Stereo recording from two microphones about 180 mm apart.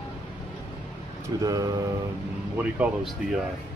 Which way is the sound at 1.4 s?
20° right (ahead or behind).